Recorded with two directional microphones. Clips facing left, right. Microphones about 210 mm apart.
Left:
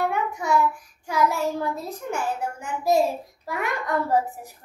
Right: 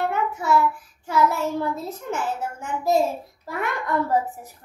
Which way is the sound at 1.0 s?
15° left (ahead or behind).